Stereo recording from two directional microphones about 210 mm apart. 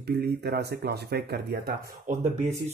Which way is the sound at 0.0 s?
50° right (ahead or behind).